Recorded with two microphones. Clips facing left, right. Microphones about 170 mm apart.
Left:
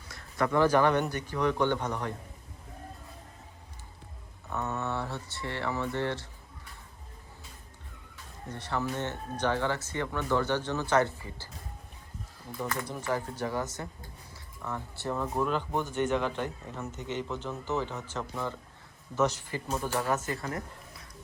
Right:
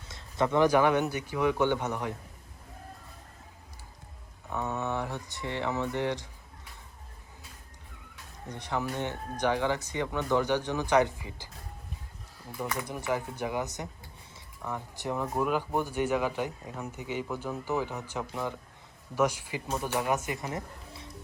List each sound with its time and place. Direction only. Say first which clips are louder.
0.1 s a man's voice: right 1 dB; 20° right (ahead or behind)
4.4 s speech: right 1 dB; 15° right (ahead or behind)
8.4 s a man's voice: even; 15° right (ahead or behind)
12.5 s speech: even; centre (ahead or behind)
12.7 s a man's voice: right 1 dB; 15° right (ahead or behind)